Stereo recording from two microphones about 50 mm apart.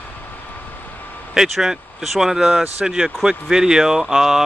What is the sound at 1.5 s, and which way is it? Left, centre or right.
Speech, centre.